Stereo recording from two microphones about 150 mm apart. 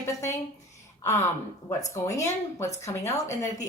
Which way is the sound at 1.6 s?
20° left (ahead or behind).